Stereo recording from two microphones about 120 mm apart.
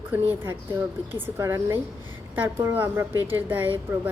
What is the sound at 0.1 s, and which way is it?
A woman's voice, 20° right (ahead or behind).